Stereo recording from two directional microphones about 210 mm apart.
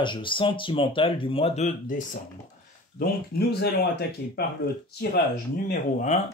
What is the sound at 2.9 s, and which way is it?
Speech, 50° left (ahead or behind).